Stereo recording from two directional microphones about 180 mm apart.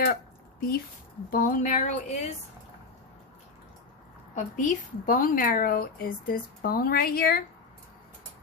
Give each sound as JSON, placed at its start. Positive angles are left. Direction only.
{"t": 0.0, "sound": "a sound", "side_deg": 60}
{"t": 1.3, "sound": "a woman's voice", "side_deg": 50}
{"t": 4.6, "sound": "a woman's voice", "side_deg": 50}